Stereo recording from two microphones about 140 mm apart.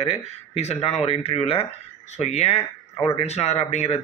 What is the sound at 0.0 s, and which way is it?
Speech, 45° left (ahead or behind).